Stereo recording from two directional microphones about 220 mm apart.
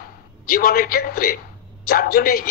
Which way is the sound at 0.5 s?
40° left (ahead or behind).